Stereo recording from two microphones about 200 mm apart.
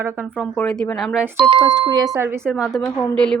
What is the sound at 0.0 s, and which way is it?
Speech, 10° right (ahead or behind).